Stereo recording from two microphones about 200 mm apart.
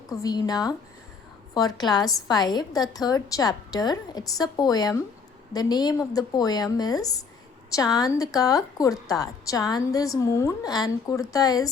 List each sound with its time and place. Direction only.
0.1 s a woman's voice: 20° left (ahead or behind)